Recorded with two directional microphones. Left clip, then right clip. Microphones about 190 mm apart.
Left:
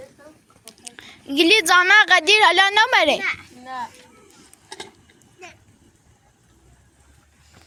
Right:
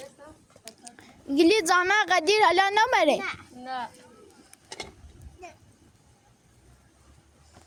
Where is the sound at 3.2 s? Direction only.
50° right (ahead or behind).